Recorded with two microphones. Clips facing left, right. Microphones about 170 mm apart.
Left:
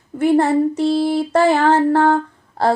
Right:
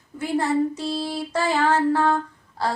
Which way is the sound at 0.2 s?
60° left (ahead or behind).